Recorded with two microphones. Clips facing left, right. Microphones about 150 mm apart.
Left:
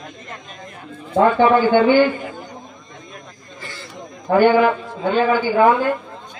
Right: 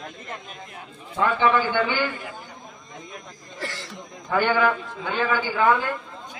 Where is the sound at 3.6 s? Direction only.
85° right.